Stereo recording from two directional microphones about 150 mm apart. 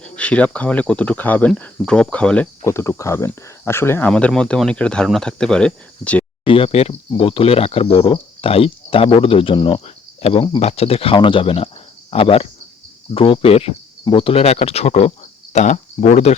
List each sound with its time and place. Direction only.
0.0 s speech: 10° left (ahead or behind)
4.1 s speech: 5° left (ahead or behind)
6.4 s speech: 35° left (ahead or behind)